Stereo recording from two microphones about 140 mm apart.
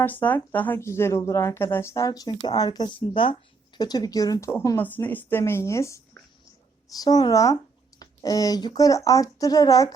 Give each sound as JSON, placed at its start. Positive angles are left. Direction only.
{"t": 0.0, "sound": "a woman's voice", "side_deg": 15}